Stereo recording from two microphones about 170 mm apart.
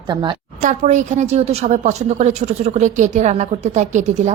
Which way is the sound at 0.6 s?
50° right (ahead or behind).